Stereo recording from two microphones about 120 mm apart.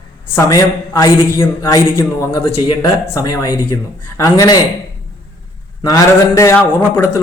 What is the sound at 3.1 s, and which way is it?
Speech, 35° left (ahead or behind).